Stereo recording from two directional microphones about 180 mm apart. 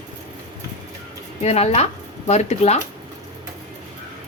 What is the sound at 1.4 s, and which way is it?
Speech, 35° left (ahead or behind).